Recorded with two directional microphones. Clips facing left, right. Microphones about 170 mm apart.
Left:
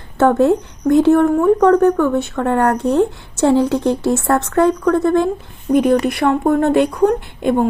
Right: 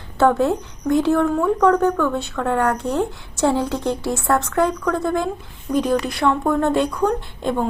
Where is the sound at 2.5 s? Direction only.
65° left (ahead or behind).